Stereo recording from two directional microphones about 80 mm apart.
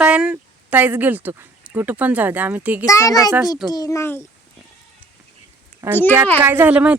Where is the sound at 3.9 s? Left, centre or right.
Left.